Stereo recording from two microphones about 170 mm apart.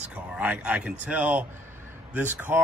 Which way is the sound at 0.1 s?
5° right (ahead or behind).